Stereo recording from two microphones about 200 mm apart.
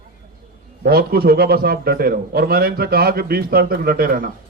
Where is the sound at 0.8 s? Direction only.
50° right (ahead or behind).